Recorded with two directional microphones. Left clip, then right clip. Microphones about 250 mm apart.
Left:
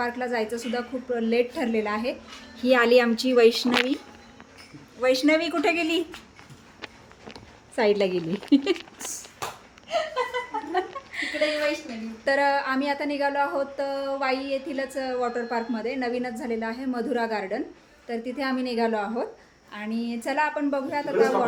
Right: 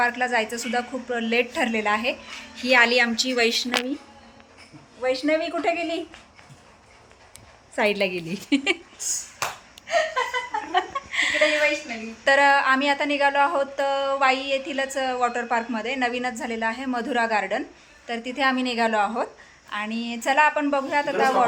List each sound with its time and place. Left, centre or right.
0.0 s a woman's voice: centre
2.6 s a woman's voice: left
4.9 s speech: centre
7.8 s speech: centre
10.7 s chuckle: centre
12.2 s a woman's voice: centre